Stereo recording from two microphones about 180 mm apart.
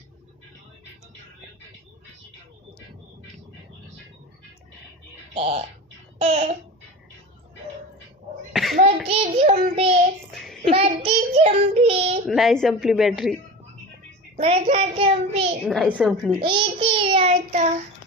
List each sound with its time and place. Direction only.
5.3 s speech: 35° right (ahead or behind)
8.5 s a sound: centre (ahead or behind)
9.0 s child singing: 35° right (ahead or behind)
10.3 s child singing: centre (ahead or behind)
10.6 s child singing: 35° right (ahead or behind)
12.3 s speech: centre (ahead or behind)
14.3 s child singing: 35° right (ahead or behind)
15.6 s speech: centre (ahead or behind)
16.4 s child singing: 30° right (ahead or behind)